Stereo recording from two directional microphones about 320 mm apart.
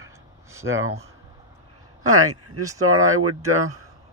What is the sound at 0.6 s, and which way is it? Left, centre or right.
Speech, right.